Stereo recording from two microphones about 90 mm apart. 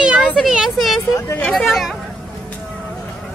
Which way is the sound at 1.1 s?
25° left (ahead or behind).